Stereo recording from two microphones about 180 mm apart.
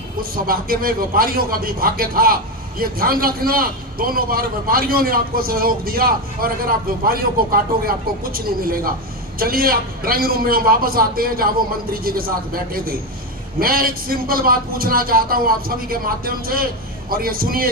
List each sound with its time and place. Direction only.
0.2 s a man's voice: 55° right (ahead or behind)